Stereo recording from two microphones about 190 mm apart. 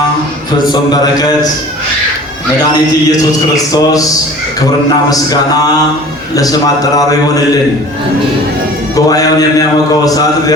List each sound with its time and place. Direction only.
0.7 s a man's voice: 20° left (ahead or behind)
3.1 s a man's voice: 20° left (ahead or behind)
9.0 s a man's voice: 20° left (ahead or behind)